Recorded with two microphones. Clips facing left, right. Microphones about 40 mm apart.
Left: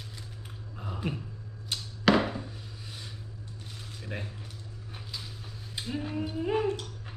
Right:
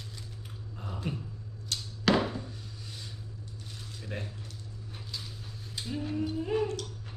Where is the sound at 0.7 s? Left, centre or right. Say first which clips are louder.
Left 2 dB; centre.